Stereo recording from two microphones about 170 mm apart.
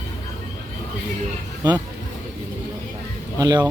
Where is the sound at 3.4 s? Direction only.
20° right (ahead or behind).